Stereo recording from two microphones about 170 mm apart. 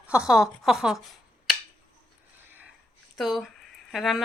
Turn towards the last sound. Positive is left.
turn(degrees=0)  # may be behind; listen again after turning